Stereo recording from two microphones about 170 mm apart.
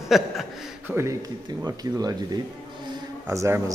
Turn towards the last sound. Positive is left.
turn(degrees=-15)  # may be behind; listen again after turning